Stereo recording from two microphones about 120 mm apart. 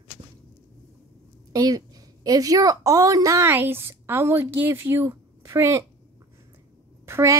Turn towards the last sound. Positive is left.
turn(degrees=-20)  # may be behind; listen again after turning